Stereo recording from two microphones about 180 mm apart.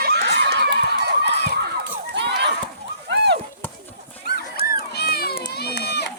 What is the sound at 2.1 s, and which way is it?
Horse, 70° right (ahead or behind).